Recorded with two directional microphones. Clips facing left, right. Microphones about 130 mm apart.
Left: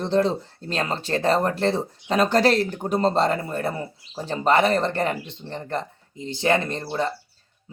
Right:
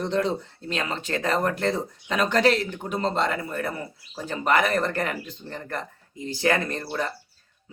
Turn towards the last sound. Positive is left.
turn(degrees=25)  # may be behind; listen again after turning